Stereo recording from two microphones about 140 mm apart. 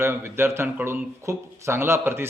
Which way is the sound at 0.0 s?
15° right (ahead or behind).